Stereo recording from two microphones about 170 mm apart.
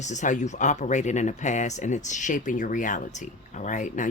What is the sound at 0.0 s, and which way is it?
Speech, 45° left (ahead or behind).